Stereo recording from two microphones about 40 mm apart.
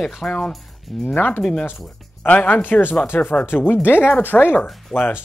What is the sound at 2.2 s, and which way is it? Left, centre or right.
Speech, left.